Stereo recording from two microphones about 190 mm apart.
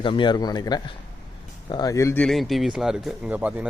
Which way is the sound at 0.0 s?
25° left (ahead or behind).